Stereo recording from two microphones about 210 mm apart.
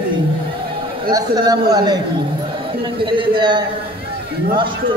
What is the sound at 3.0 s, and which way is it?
A man's voice, 25° right (ahead or behind).